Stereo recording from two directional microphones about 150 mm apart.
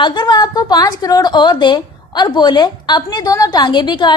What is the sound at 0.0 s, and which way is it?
A woman's voice, 30° left (ahead or behind).